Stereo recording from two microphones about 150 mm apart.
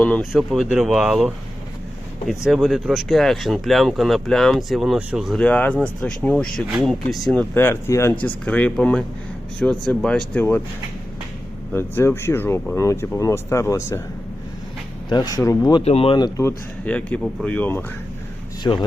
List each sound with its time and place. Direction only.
0.0 s speech: centre (ahead or behind)
2.4 s speech: centre (ahead or behind)
7.5 s speech: 15° left (ahead or behind)
11.7 s speech: 15° left (ahead or behind)
15.1 s speech: 25° left (ahead or behind)
15.8 s speech: 40° left (ahead or behind)
16.4 s speech: 15° left (ahead or behind)
18.6 s speech: 30° left (ahead or behind)